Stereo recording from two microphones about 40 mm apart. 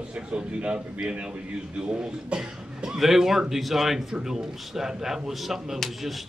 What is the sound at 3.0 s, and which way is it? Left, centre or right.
Speech, centre.